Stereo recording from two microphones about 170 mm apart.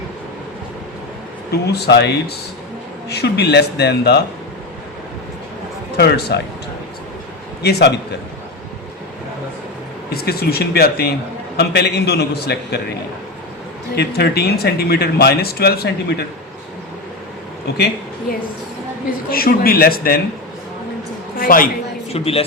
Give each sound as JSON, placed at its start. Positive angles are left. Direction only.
{"t": 1.6, "sound": "speech", "side_deg": 75}
{"t": 6.0, "sound": "speech", "side_deg": 75}
{"t": 7.6, "sound": "speech", "side_deg": 75}
{"t": 10.1, "sound": "speech", "side_deg": 65}
{"t": 13.9, "sound": "speech", "side_deg": 70}
{"t": 19.3, "sound": "speech", "side_deg": 60}
{"t": 21.3, "sound": "a woman's voice", "side_deg": 55}
{"t": 22.1, "sound": "speech", "side_deg": 35}